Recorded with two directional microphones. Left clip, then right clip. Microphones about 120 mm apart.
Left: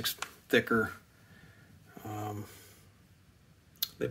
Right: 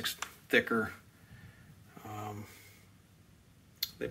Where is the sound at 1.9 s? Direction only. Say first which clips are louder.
Left 3 dB; 50° left (ahead or behind).